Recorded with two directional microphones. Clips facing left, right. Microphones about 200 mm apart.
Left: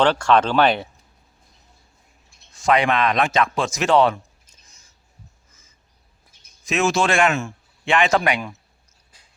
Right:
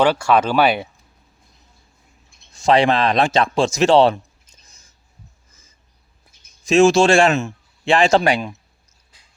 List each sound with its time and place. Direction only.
0.0 s speech: 10° right (ahead or behind)
2.6 s speech: 30° right (ahead or behind)
6.7 s speech: 30° right (ahead or behind)